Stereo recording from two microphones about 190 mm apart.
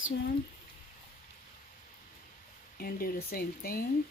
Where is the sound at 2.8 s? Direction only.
50° left (ahead or behind).